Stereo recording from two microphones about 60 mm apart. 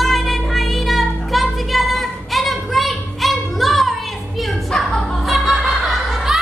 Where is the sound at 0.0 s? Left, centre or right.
Centre.